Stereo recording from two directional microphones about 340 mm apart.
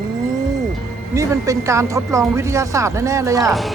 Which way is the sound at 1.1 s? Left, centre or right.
Centre.